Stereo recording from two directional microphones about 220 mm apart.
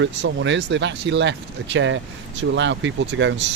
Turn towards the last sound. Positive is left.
turn(degrees=-55)  # may be behind; listen again after turning